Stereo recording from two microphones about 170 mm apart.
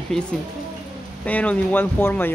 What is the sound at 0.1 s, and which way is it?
Speech, 5° left (ahead or behind).